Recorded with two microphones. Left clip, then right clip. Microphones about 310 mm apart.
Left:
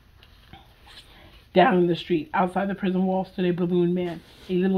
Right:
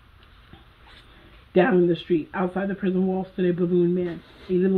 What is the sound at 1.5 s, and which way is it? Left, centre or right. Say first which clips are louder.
Speech: left 1 dB; centre.